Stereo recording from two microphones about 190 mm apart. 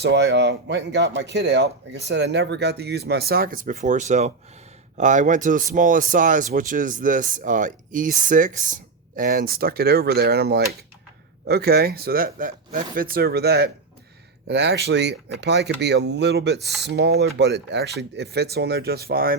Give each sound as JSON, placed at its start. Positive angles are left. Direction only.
{"t": 0.0, "sound": "speech", "side_deg": -65}